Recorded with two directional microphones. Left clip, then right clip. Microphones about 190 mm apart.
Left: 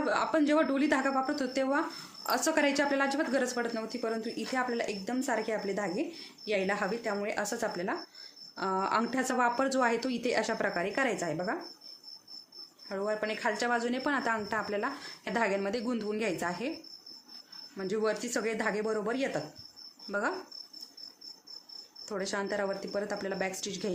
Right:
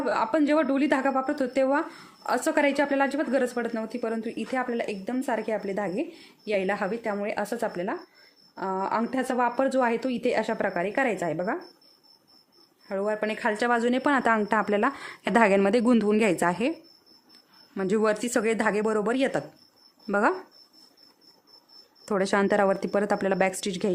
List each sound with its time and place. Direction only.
0.0 s a woman's voice: 35° right (ahead or behind)
12.9 s a woman's voice: 45° right (ahead or behind)
17.7 s a woman's voice: 55° right (ahead or behind)
22.0 s speech: 55° right (ahead or behind)